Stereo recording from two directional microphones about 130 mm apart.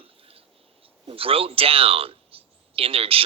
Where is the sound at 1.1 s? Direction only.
45° right (ahead or behind).